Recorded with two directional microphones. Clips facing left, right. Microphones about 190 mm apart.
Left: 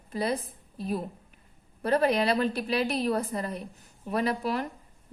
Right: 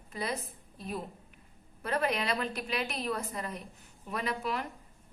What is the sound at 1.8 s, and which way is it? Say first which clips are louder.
A woman's voice: left 7 dB; 35° left (ahead or behind).